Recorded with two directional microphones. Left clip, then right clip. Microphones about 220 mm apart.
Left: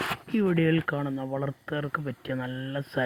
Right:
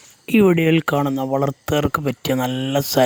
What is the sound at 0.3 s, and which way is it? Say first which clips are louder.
Speech: right 12 dB; 55° right (ahead or behind).